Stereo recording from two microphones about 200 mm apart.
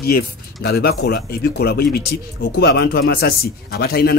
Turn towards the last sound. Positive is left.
turn(degrees=50)  # may be behind; listen again after turning